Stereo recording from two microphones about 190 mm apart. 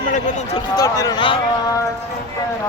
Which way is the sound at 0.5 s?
20° left (ahead or behind).